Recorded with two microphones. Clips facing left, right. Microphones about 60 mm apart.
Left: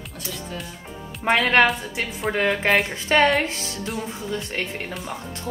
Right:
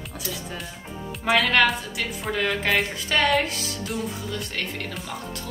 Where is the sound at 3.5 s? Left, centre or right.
Left.